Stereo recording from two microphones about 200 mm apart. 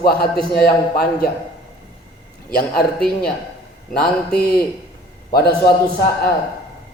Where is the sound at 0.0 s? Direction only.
50° left (ahead or behind).